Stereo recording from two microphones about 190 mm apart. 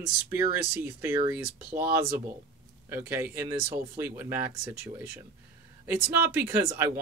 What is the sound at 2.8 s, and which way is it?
A man's voice, 10° right (ahead or behind).